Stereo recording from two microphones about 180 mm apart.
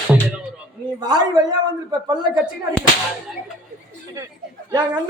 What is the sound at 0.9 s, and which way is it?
Speech, 20° right (ahead or behind).